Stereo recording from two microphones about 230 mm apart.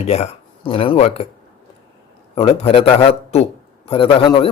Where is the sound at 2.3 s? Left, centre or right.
Left.